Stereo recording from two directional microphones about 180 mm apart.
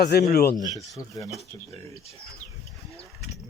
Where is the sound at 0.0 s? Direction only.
60° left (ahead or behind).